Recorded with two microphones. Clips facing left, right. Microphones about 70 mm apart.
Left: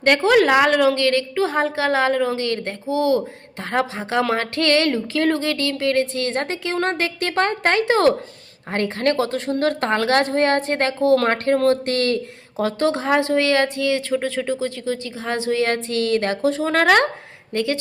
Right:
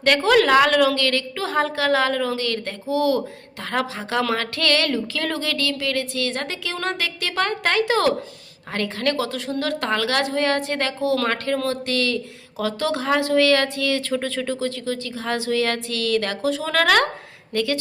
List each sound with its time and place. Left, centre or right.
0.0 s a woman's voice: left